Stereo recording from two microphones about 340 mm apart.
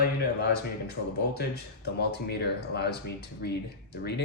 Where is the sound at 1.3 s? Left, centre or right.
Left.